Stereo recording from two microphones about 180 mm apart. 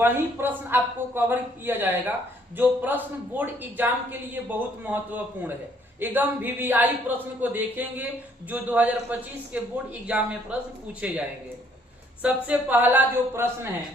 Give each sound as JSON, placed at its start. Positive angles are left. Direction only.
{"t": 0.0, "sound": "a man's voice", "side_deg": -10}
{"t": 12.2, "sound": "a man's voice", "side_deg": -10}